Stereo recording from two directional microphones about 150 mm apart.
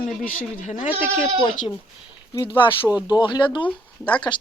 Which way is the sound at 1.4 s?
30° left (ahead or behind).